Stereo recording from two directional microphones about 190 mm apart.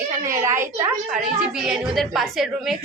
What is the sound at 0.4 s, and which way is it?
A woman's voice, 15° right (ahead or behind).